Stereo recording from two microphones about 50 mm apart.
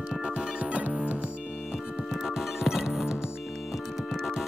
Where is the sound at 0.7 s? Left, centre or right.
Right.